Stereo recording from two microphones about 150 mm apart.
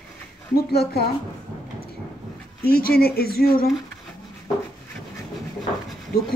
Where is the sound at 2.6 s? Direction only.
90° left.